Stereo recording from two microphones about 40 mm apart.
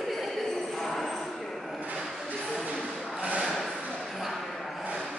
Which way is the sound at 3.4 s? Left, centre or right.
Centre.